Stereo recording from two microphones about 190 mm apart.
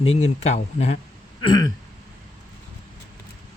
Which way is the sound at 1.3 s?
20° left (ahead or behind).